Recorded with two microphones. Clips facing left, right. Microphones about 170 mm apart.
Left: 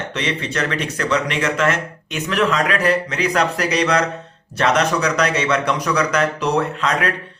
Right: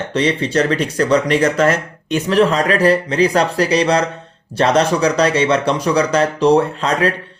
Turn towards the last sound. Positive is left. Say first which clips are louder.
# right 3 dB
turn(degrees=-30)  # may be behind; listen again after turning